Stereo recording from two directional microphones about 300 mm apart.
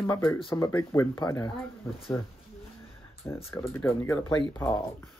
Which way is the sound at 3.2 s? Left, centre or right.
Centre.